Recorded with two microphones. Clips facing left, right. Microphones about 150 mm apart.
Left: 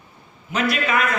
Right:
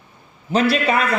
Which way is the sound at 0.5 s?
30° right (ahead or behind).